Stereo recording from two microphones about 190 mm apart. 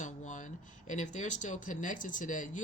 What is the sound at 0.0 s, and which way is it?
Speech, 40° left (ahead or behind).